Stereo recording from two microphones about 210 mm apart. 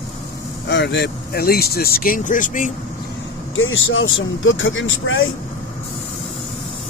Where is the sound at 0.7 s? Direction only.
55° left (ahead or behind); by 2.7 s 40° left (ahead or behind).